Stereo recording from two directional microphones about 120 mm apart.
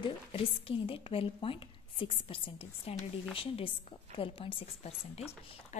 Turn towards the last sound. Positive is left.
turn(degrees=55)  # may be behind; listen again after turning